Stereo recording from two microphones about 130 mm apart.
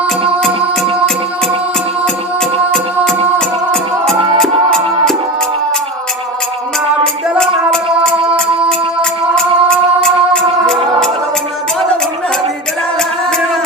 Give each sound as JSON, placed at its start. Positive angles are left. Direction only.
{"t": 2.7, "sound": "music", "side_deg": 5}
{"t": 7.3, "sound": "music", "side_deg": 5}